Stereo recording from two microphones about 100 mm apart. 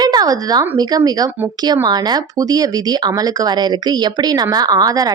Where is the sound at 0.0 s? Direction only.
40° right (ahead or behind).